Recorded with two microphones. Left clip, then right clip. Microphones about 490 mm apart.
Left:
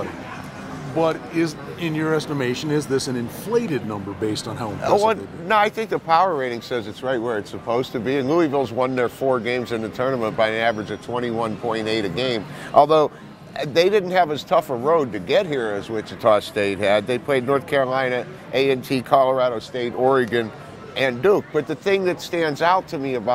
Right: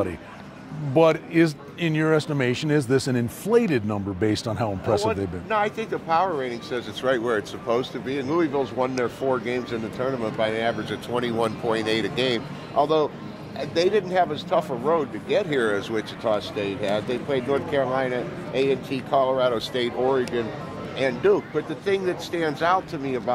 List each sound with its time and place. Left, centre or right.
0.9 s speech: right
5.0 s speech: left
7.0 s speech: left
12.7 s speech: left
15.6 s speech: left
16.2 s speech: left
20.1 s speech: left